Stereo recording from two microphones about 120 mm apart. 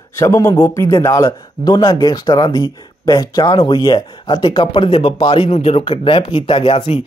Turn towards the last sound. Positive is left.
turn(degrees=45)  # may be behind; listen again after turning